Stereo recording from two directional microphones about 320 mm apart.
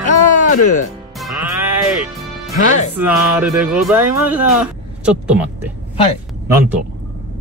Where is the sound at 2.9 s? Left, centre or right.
Centre.